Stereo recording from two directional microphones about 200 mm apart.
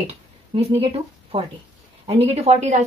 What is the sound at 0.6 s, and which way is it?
Speech, 30° right (ahead or behind).